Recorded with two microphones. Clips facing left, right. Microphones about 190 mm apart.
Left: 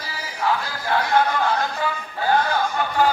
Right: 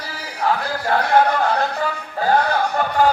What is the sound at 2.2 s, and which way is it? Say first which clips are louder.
Music: right 3 dB; 40° right (ahead or behind).